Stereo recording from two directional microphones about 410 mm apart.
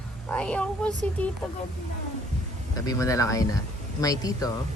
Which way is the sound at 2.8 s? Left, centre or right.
Centre.